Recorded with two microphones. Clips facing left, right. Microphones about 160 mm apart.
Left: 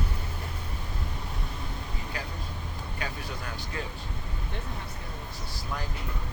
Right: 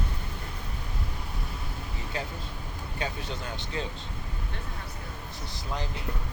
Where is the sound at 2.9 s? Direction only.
25° right (ahead or behind).